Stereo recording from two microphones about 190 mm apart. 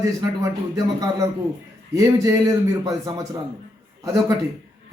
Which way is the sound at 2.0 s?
15° right (ahead or behind).